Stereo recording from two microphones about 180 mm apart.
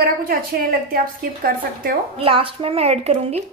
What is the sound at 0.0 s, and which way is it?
A woman's voice, 50° right (ahead or behind).